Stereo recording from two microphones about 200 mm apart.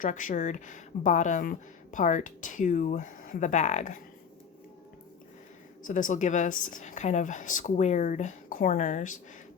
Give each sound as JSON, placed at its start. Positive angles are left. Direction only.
{"t": 0.0, "sound": "speech", "side_deg": 40}
{"t": 5.8, "sound": "speech", "side_deg": 40}